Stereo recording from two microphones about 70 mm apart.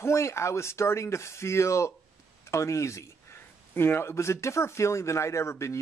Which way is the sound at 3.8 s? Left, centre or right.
Left.